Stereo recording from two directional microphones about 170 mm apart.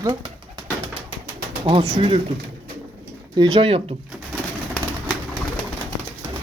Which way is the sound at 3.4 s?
30° right (ahead or behind).